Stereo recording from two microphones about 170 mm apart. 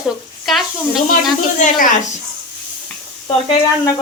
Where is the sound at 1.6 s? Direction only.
50° left (ahead or behind).